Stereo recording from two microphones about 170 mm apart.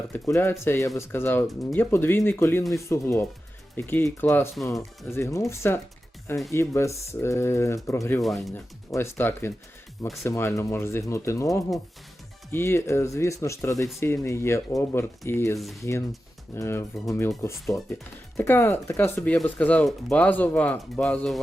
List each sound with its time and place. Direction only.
0.1 s speech: 15° left (ahead or behind)
8.2 s speech: centre (ahead or behind)
8.5 s speech: 15° left (ahead or behind)
15.5 s speech: centre (ahead or behind)
15.8 s speech: 15° left (ahead or behind)